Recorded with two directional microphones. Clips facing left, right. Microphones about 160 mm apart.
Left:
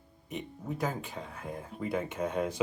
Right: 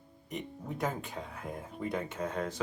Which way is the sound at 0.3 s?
Centre (ahead or behind).